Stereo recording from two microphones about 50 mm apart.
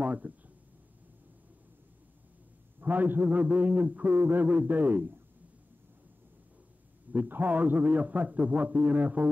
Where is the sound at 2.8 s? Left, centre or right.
Right.